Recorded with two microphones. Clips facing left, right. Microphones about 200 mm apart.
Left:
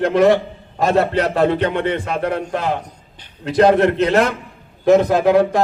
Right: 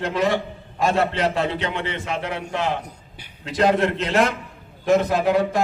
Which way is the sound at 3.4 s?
60° left (ahead or behind).